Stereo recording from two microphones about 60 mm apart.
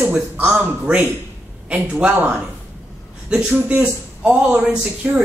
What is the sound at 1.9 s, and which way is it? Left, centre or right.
Speech, right.